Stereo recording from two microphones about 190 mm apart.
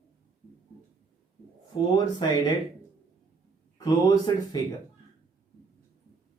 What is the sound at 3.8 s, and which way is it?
Speech, 20° left (ahead or behind).